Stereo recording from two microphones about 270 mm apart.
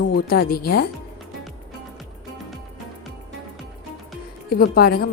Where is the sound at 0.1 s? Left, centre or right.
Left.